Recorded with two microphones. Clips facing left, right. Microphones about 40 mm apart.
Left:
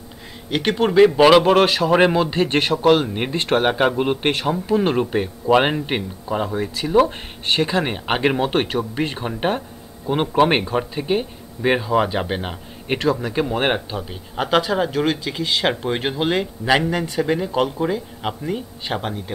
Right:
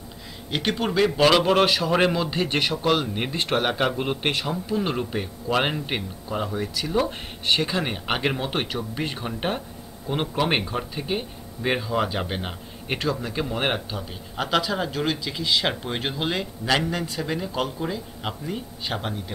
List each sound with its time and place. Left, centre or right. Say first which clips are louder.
0.5 s speech: left 6 dB; left
3.6 s speech: left 6 dB; centre
4.3 s speech: left 6 dB; left; by 6.6 s centre
7.6 s speech: left 5 dB; centre
8.4 s speech: left 7 dB; left; by 13.0 s centre
13.0 s speech: left 7 dB; left
15.6 s speech: left 6 dB; centre